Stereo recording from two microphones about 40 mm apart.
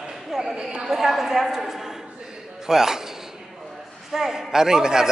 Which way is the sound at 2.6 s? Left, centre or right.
Centre.